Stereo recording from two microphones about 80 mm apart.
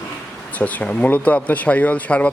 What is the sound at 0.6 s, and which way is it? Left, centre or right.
Speech, centre.